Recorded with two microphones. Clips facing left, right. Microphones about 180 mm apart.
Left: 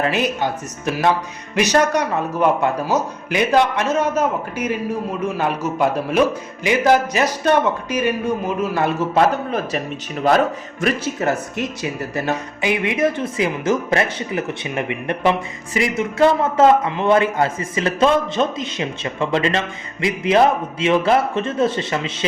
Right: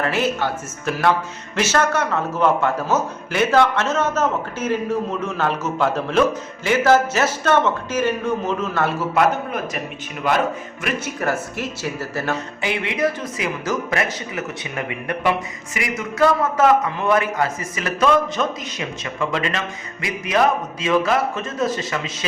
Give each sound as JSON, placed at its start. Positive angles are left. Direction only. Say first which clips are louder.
{"t": 0.0, "sound": "a man's voice", "louder": "left 1 dB", "side_deg": 15}
{"t": 10.2, "sound": "a man's voice", "louder": "left 4 dB", "side_deg": 40}
{"t": 11.2, "sound": "speech", "louder": "left 2 dB", "side_deg": 20}